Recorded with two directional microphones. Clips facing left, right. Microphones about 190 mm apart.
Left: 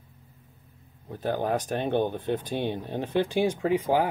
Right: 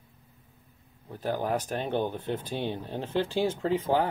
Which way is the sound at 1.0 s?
15° left (ahead or behind).